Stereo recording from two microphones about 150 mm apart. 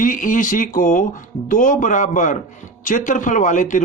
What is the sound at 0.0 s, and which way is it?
A man's voice, 60° left (ahead or behind).